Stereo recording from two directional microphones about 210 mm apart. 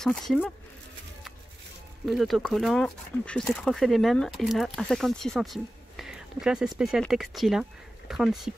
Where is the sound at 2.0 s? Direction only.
Centre (ahead or behind).